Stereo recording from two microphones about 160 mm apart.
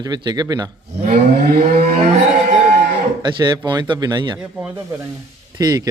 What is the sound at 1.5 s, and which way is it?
Moo, 70° right (ahead or behind).